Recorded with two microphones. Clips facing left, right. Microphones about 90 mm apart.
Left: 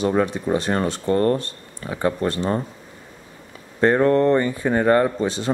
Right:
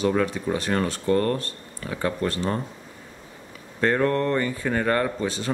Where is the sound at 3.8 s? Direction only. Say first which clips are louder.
Left 5 dB; 25° left (ahead or behind).